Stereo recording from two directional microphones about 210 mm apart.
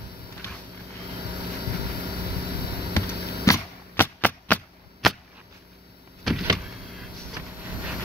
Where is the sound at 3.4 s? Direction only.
10° left (ahead or behind).